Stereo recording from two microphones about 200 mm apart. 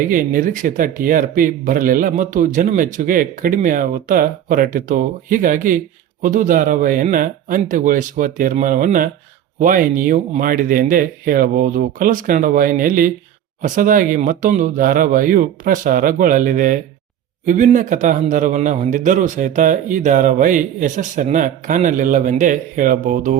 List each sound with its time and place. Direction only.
0.0 s a man's voice: 40° right (ahead or behind)